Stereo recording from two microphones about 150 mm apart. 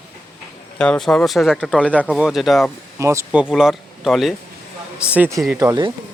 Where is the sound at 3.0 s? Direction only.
20° right (ahead or behind).